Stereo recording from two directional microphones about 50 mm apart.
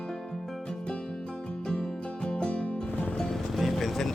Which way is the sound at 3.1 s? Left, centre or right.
Centre.